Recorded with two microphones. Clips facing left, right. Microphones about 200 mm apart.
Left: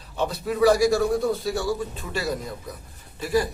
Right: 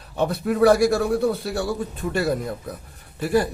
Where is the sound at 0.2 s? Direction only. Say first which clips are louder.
Right 3 dB; 55° right (ahead or behind).